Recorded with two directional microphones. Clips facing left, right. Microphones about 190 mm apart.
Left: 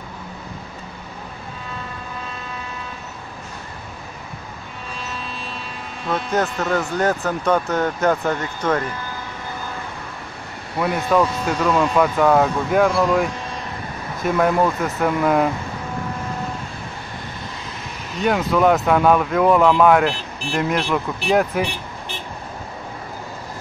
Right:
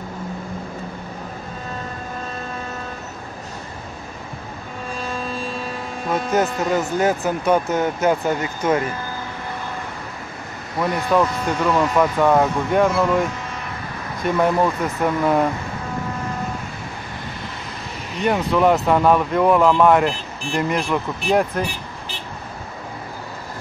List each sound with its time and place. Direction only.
4.9 s music: 45° right (ahead or behind)
6.3 s speech: 10° right (ahead or behind)
10.8 s speech: centre (ahead or behind)
14.2 s speech: centre (ahead or behind)
18.2 s speech: centre (ahead or behind)